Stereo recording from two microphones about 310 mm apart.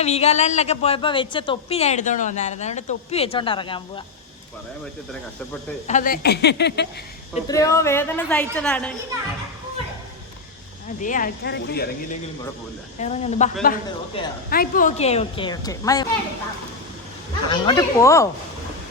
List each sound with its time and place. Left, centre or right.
0.0 s a woman's voice: left
5.9 s speech: left
7.4 s a woman's voice: centre
11.0 s a woman's voice: left
13.0 s a woman's voice: left
17.5 s a woman's voice: centre